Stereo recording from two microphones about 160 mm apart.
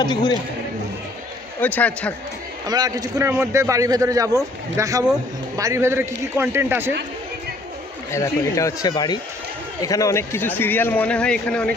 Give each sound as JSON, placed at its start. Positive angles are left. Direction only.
{"t": 0.0, "sound": "speech", "side_deg": 25}
{"t": 1.6, "sound": "a man's voice", "side_deg": 10}
{"t": 2.6, "sound": "a man's voice", "side_deg": -25}
{"t": 8.1, "sound": "a man's voice", "side_deg": 20}